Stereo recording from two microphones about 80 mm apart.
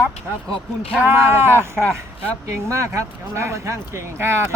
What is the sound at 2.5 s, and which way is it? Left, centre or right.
Speech, right.